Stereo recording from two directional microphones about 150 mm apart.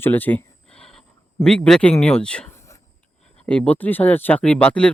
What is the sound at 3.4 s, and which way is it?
Speech, 5° left (ahead or behind).